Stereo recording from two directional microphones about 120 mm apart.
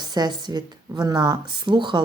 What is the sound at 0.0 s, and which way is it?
Speech, 35° right (ahead or behind).